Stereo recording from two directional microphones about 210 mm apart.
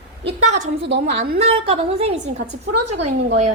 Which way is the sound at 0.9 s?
55° right (ahead or behind).